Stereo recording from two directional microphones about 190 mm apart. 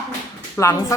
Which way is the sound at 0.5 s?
15° left (ahead or behind).